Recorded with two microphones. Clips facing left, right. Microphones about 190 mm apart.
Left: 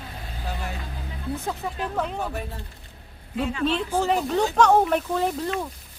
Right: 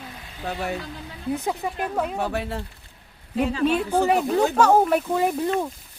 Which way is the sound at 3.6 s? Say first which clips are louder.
Right 3 dB; 10° right (ahead or behind).